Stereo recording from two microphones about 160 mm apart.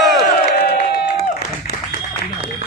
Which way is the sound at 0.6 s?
80° left.